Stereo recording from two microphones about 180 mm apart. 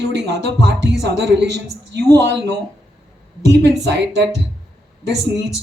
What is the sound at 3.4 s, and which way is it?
Speech, 70° right (ahead or behind).